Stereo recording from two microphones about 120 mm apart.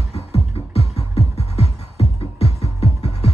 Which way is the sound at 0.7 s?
60° left (ahead or behind).